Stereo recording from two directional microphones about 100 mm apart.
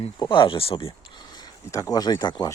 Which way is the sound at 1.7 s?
35° left (ahead or behind).